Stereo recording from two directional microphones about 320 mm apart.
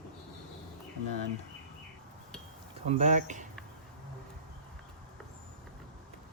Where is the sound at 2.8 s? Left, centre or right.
Right.